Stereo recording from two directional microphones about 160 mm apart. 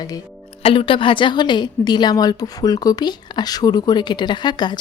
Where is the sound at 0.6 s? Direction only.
35° left (ahead or behind).